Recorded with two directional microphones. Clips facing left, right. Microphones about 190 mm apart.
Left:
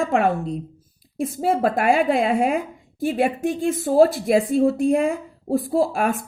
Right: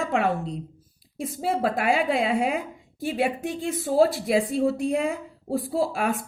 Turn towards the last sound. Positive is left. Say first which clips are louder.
# left 4 dB
turn(degrees=50)  # may be behind; listen again after turning